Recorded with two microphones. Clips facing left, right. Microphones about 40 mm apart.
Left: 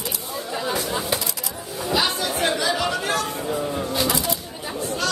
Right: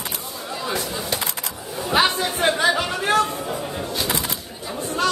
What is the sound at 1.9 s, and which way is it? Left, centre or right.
Chatter, right.